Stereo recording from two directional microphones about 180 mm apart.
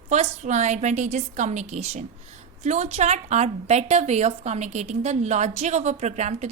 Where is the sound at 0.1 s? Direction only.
40° right (ahead or behind).